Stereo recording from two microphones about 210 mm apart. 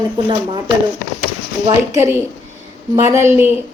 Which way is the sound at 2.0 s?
10° right (ahead or behind).